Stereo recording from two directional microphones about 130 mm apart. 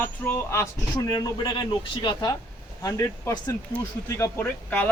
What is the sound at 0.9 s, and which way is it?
Speech, 30° left (ahead or behind).